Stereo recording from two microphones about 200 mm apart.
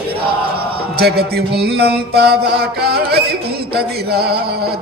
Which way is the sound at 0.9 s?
55° right (ahead or behind).